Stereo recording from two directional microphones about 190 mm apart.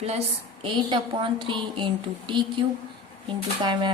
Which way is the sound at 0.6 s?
25° right (ahead or behind).